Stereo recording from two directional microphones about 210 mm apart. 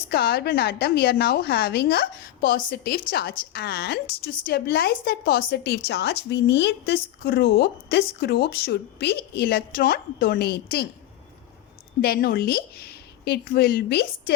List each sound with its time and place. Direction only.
0.1 s a woman's voice: 50° left (ahead or behind)
12.0 s a woman's voice: 45° left (ahead or behind)